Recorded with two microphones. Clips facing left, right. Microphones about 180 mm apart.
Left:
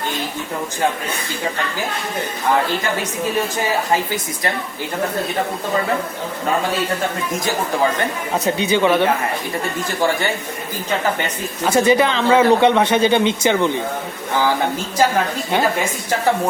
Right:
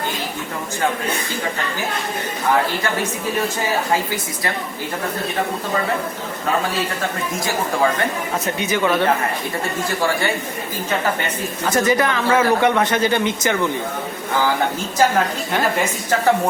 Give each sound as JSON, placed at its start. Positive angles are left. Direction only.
{"t": 8.5, "sound": "speech", "side_deg": 30}
{"t": 8.8, "sound": "a woman's voice", "side_deg": 15}
{"t": 11.6, "sound": "a woman's voice", "side_deg": 15}